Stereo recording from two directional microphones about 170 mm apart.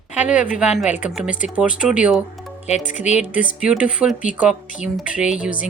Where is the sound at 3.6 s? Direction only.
5° right (ahead or behind).